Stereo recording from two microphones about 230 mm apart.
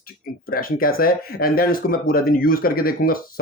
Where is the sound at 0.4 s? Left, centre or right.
Left.